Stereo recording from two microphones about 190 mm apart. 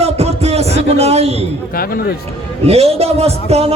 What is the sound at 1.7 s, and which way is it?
Speech, 50° left (ahead or behind).